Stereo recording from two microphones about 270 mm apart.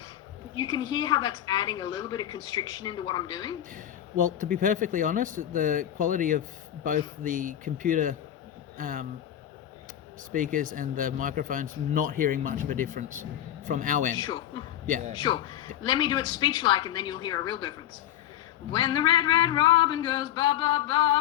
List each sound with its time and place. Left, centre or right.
0.5 s a woman's voice: centre
3.8 s speech: right
10.3 s speech: right
14.2 s a man's voice: centre
14.8 s a man's voice: right
15.1 s a woman's voice: centre